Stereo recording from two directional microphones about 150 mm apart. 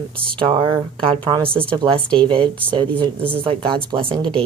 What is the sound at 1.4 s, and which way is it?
Speech, 5° left (ahead or behind).